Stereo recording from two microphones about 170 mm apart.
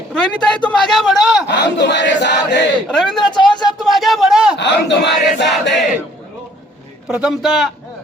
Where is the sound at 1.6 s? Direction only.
90° left.